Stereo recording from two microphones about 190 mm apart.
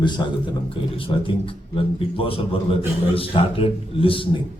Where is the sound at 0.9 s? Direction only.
30° left (ahead or behind).